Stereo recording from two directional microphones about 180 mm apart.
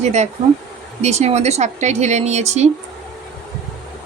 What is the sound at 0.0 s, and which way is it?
Speech, 40° right (ahead or behind).